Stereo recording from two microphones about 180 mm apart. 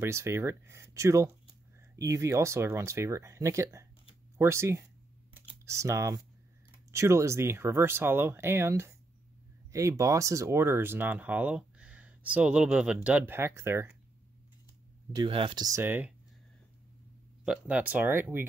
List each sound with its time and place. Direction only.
0.0 s speech: 15° right (ahead or behind)
15.1 s speech: 30° right (ahead or behind); by 16.1 s 10° right (ahead or behind)
17.5 s speech: 5° right (ahead or behind)